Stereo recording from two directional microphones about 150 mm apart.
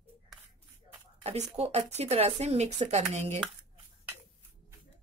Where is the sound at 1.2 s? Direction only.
45° right (ahead or behind).